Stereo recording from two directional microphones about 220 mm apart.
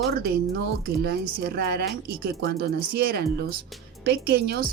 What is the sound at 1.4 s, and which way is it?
Speech, 45° right (ahead or behind).